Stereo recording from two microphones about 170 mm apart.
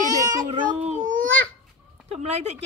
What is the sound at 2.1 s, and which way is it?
Speech, 40° right (ahead or behind).